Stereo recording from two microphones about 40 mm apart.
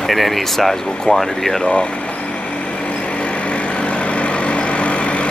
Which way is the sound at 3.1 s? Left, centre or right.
Left.